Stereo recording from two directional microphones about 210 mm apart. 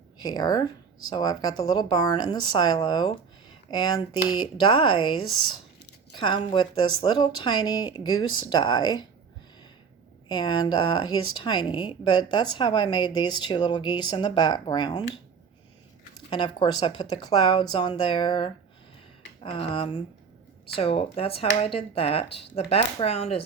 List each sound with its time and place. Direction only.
0.2 s speech: 20° left (ahead or behind)
6.1 s speech: 20° left (ahead or behind)
10.2 s speech: 20° left (ahead or behind)
16.3 s speech: 20° left (ahead or behind)